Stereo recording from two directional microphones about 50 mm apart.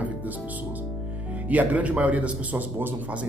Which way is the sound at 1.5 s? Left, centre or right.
Right.